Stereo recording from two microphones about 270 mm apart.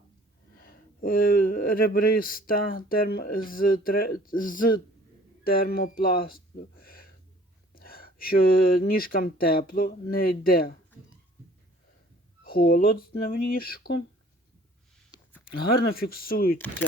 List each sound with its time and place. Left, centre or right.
0.5 s speech: left
6.7 s a sound: left
7.7 s speech: left
12.5 s speech: left
15.6 s speech: left